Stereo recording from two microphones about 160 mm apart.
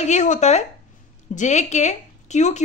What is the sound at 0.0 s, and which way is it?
A woman's voice, 50° left (ahead or behind).